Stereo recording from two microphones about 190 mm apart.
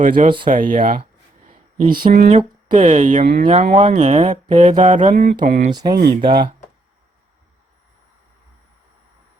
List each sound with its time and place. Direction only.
0.0 s speech: 45° right (ahead or behind)
1.5 s a sound: 25° right (ahead or behind)
2.1 s speech: 40° right (ahead or behind)
5.7 s speech: 20° right (ahead or behind)